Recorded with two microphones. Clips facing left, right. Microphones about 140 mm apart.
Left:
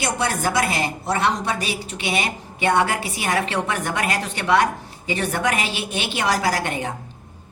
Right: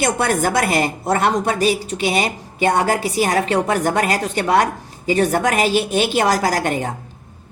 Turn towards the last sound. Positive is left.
turn(degrees=-45)  # may be behind; listen again after turning